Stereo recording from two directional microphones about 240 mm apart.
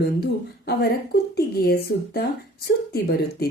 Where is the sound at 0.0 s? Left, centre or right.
Left.